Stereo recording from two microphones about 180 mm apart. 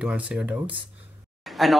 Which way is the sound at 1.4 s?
Centre (ahead or behind).